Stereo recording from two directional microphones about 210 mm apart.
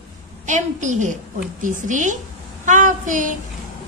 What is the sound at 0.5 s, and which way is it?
A woman's voice, 35° right (ahead or behind).